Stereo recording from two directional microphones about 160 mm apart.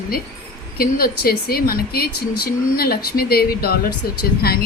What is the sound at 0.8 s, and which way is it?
Speech, 70° left (ahead or behind).